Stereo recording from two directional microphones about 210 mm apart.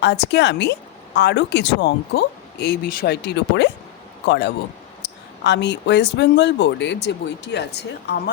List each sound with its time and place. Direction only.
0.0 s speech: 55° left (ahead or behind)